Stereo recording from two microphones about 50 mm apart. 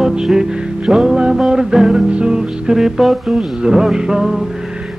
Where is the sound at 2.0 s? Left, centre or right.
Centre.